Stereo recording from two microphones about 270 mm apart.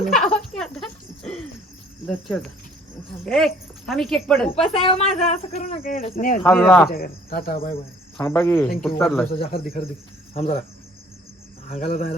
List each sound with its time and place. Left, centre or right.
0.0 s a sound: centre
0.5 s cricket: centre
3.2 s speech: centre
4.7 s speech: centre
6.4 s speech: centre
6.9 s cricket: left
8.2 s speech: centre
9.3 s speech: left
11.7 s speech: left